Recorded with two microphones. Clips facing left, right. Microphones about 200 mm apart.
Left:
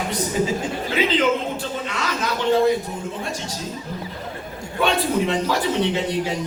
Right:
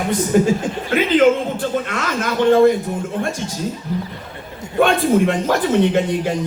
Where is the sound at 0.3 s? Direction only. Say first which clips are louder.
Right 7 dB; 55° right (ahead or behind).